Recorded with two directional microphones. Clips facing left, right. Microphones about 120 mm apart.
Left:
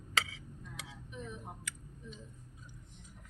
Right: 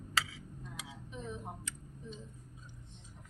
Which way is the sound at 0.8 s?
25° right (ahead or behind).